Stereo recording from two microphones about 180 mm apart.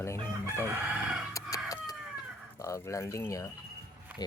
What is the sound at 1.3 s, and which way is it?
Chicken, 20° left (ahead or behind).